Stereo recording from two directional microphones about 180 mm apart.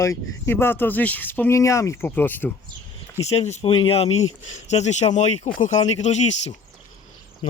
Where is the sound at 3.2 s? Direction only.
35° left (ahead or behind).